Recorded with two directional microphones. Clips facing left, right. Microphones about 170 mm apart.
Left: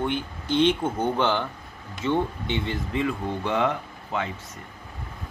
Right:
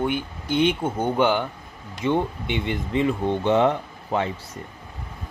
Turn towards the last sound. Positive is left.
turn(degrees=-30)  # may be behind; listen again after turning